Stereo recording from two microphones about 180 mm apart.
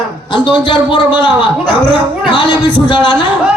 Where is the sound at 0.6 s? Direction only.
25° left (ahead or behind).